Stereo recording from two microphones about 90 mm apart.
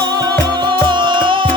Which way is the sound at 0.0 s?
50° right (ahead or behind).